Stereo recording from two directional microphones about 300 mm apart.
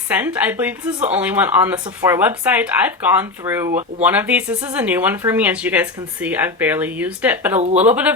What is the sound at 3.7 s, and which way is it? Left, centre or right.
Speech, right.